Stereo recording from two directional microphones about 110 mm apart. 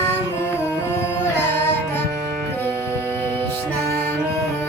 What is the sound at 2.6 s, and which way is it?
Music, 20° left (ahead or behind).